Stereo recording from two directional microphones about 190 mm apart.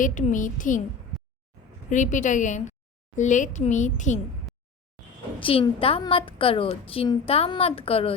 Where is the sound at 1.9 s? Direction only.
40° left (ahead or behind).